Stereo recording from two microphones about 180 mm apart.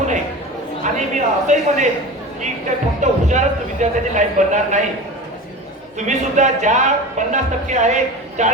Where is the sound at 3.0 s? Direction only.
40° right (ahead or behind).